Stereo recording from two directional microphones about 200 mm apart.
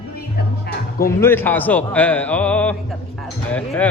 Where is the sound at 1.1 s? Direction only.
10° left (ahead or behind).